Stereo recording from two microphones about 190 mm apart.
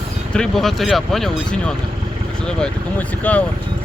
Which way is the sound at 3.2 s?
10° left (ahead or behind).